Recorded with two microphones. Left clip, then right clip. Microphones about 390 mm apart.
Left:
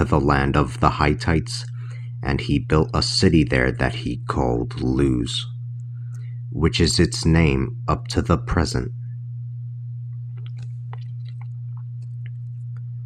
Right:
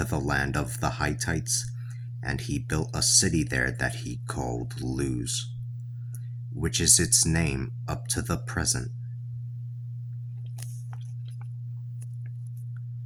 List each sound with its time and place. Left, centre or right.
0.0 s speech: right
6.6 s speech: right